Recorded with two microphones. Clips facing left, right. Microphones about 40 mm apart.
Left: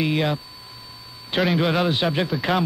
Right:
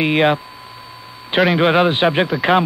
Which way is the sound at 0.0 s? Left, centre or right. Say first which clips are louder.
Right 7 dB; right.